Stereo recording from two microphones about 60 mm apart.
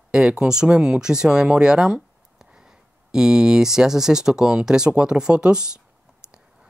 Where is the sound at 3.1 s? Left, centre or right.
Centre.